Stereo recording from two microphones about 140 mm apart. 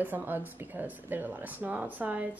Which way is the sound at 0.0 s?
15° right (ahead or behind).